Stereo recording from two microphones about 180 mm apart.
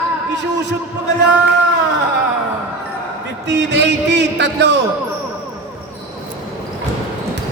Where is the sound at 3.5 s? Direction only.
75° right (ahead or behind).